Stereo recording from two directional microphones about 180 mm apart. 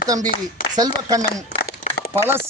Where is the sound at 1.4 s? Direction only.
45° left (ahead or behind).